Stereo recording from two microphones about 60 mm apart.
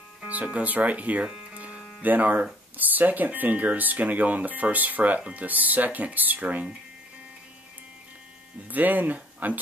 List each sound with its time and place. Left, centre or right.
0.3 s speech: right
1.5 s hum: right
2.0 s speech: right
8.6 s speech: right